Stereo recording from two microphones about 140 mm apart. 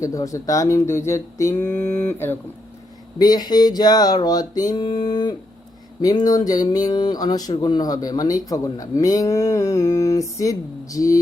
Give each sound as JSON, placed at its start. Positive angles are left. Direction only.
{"t": 0.0, "sound": "speech", "side_deg": 25}
{"t": 3.2, "sound": "speech", "side_deg": 30}